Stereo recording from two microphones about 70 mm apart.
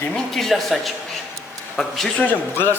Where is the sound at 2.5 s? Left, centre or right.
Left.